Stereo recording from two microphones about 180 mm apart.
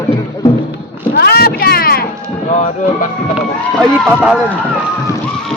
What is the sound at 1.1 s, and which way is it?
Vehicle, 60° left (ahead or behind).